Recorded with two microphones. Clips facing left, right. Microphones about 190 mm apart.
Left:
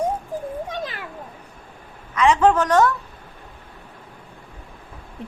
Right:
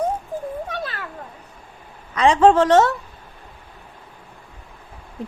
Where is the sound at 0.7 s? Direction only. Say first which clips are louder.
Even; 15° left (ahead or behind).